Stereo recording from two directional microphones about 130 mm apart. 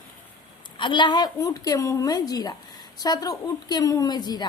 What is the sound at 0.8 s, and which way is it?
A woman's voice, 35° left (ahead or behind).